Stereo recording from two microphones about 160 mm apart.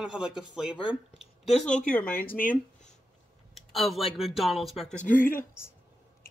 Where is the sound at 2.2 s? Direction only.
60° left (ahead or behind).